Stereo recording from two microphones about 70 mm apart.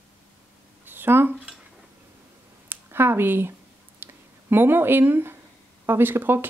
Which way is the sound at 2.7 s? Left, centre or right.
Right.